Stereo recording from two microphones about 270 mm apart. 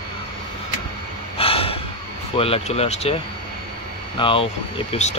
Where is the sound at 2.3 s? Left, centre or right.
Left.